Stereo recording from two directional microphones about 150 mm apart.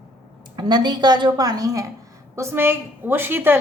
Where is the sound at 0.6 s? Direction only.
30° right (ahead or behind).